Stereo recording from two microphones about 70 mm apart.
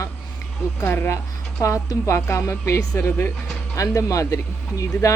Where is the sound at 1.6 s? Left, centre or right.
Left.